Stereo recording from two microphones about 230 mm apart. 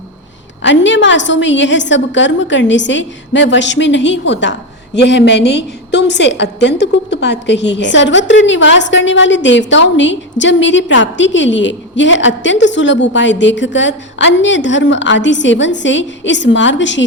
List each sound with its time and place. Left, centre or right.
0.6 s a woman's voice: left